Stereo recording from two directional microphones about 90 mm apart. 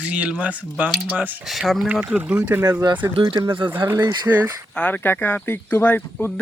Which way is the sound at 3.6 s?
25° right (ahead or behind).